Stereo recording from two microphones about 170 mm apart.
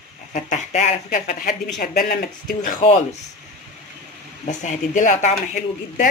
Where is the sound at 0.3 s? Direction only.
45° left (ahead or behind).